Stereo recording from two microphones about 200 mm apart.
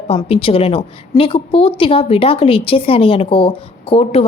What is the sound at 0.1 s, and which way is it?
A woman's voice, 25° left (ahead or behind).